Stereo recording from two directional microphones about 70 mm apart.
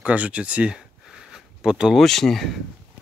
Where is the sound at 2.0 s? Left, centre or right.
Centre.